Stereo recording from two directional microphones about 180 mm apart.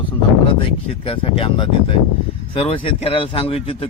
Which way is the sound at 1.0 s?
30° left (ahead or behind).